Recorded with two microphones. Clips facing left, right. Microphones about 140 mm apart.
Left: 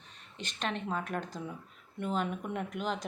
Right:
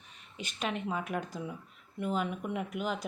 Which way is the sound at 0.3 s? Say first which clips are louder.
Right 1 dB; 10° right (ahead or behind).